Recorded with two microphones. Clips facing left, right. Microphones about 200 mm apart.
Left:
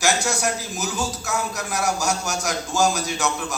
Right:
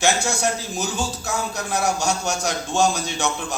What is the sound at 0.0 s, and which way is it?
A man's voice, 25° right (ahead or behind).